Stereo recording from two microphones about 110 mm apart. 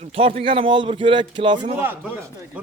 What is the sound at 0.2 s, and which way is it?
A man's voice, 55° right (ahead or behind).